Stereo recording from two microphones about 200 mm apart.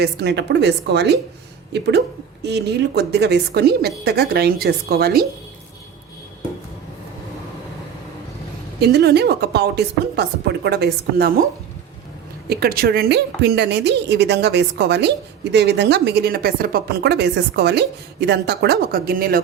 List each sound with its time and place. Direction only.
0.0 s a woman's voice: 55° right (ahead or behind)
2.4 s a woman's voice: 55° right (ahead or behind)
8.8 s a woman's voice: 55° right (ahead or behind)
12.5 s a woman's voice: 50° right (ahead or behind)